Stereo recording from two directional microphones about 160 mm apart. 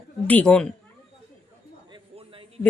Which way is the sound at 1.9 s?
35° right (ahead or behind).